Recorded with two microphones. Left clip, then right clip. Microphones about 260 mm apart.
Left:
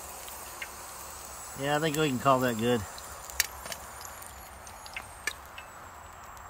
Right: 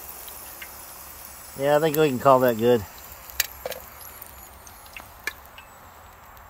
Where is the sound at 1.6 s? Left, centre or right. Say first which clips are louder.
Right 9 dB; centre.